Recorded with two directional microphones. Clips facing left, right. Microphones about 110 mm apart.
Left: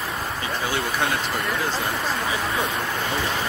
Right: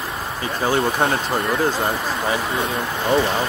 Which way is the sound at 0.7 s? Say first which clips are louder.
Right 7 dB; 35° right (ahead or behind).